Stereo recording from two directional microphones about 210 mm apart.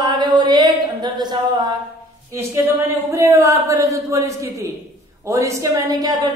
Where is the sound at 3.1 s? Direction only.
15° right (ahead or behind).